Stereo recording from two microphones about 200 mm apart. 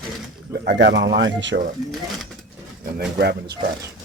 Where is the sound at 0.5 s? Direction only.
55° right (ahead or behind).